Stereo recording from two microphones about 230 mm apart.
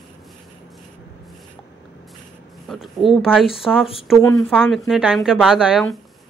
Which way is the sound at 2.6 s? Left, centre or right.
Centre.